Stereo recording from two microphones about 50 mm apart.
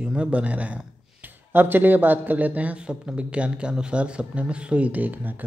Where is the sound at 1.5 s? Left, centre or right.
Right.